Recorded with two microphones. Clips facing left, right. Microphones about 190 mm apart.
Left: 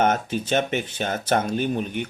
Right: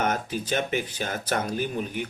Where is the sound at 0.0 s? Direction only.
25° left (ahead or behind).